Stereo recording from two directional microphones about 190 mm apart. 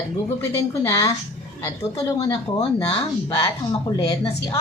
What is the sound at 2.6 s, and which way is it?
Speech, 25° left (ahead or behind).